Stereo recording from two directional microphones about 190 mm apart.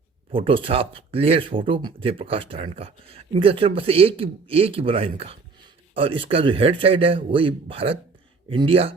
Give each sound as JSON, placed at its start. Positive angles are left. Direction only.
{"t": 0.3, "sound": "speech", "side_deg": -30}